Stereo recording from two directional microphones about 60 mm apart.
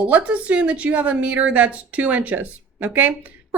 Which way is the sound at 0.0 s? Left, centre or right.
Right.